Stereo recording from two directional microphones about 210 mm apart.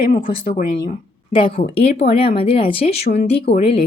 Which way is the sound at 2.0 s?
30° left (ahead or behind).